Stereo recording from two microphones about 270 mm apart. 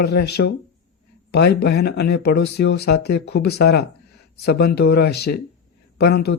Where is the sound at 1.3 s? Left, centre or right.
Left.